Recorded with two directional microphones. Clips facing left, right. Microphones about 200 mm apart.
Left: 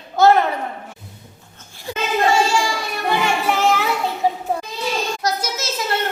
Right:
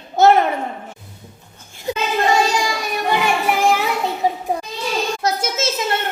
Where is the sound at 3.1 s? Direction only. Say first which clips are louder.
Right 1 dB; 10° right (ahead or behind).